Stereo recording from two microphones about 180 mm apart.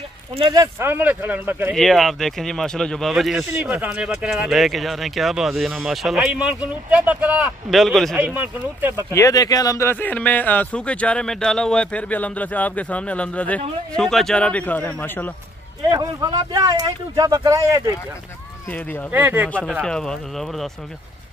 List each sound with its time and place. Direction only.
0.3 s speech: 30° right (ahead or behind)
0.6 s speech: 15° right (ahead or behind)
1.8 s speech: centre (ahead or behind)
8.4 s speech: 10° right (ahead or behind)
9.1 s speech: 20° left (ahead or behind)
15.9 s speech: 20° right (ahead or behind)
18.7 s speech: 10° left (ahead or behind)
19.0 s speech: 10° right (ahead or behind)
19.8 s speech: 5° left (ahead or behind)